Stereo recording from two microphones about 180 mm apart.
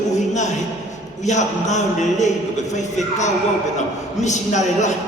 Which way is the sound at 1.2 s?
40° left (ahead or behind).